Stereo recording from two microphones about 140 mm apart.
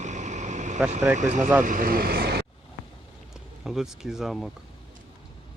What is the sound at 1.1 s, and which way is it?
Speech, 60° right (ahead or behind).